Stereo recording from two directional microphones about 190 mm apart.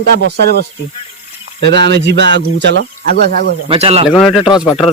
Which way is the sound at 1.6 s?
65° right (ahead or behind).